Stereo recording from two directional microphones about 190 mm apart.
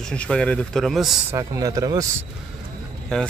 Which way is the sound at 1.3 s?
15° right (ahead or behind).